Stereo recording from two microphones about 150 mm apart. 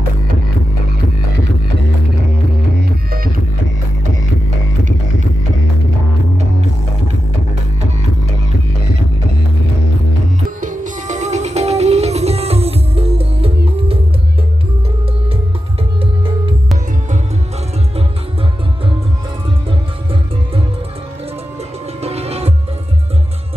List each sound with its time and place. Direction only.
10.6 s music: 60° right (ahead or behind); by 13.9 s 40° right (ahead or behind)
22.0 s music: 45° right (ahead or behind)